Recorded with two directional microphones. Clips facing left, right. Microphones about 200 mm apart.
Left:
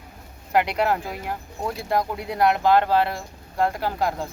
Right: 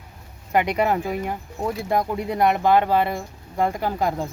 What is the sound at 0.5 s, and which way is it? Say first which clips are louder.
Speech: right 1 dB; centre (ahead or behind).